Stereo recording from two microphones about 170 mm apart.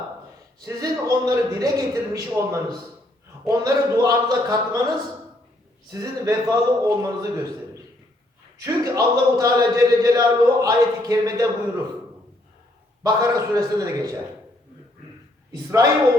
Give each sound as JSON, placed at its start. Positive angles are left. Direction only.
{"t": 0.6, "sound": "a man's voice", "side_deg": -20}
{"t": 8.6, "sound": "a man's voice", "side_deg": -20}
{"t": 13.0, "sound": "a man's voice", "side_deg": -20}